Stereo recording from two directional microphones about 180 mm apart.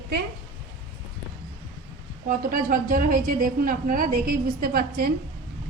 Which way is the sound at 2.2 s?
50° right (ahead or behind).